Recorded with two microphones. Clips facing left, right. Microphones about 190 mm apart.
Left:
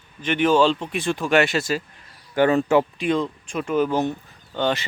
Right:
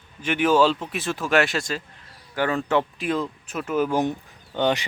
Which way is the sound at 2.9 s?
5° right (ahead or behind).